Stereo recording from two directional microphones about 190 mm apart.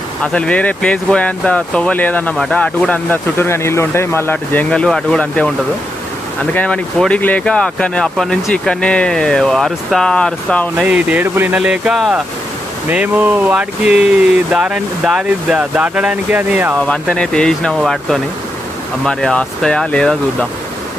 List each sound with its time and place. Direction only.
0.2 s speech: 5° left (ahead or behind)
10.8 s speech: 10° right (ahead or behind)
16.8 s speech: 5° left (ahead or behind)